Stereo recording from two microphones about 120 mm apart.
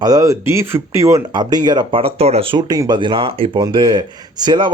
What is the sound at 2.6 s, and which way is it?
Speech, 30° right (ahead or behind).